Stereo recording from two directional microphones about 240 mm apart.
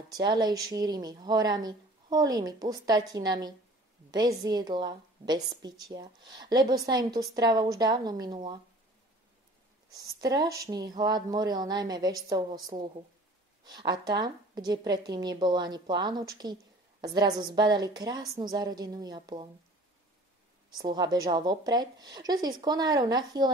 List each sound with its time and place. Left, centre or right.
0.1 s a woman's voice: centre
9.9 s a woman's voice: centre
20.7 s a woman's voice: centre